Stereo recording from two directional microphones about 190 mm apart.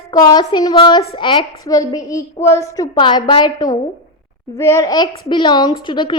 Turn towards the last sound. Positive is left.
turn(degrees=25)  # may be behind; listen again after turning